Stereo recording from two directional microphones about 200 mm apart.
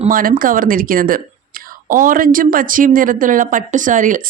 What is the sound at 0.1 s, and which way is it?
Speech, 45° right (ahead or behind).